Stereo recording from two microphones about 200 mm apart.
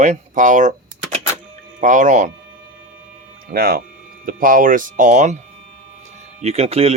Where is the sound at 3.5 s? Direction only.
50° right (ahead or behind).